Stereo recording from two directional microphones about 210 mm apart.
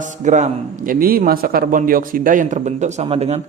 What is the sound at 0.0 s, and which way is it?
A man's voice, 35° right (ahead or behind).